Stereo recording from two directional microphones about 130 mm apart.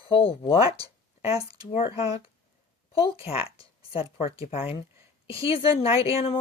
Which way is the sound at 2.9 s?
45° left (ahead or behind).